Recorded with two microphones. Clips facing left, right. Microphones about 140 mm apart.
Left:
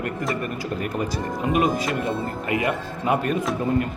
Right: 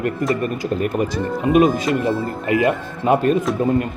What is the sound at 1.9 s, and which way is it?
Speech, 25° right (ahead or behind).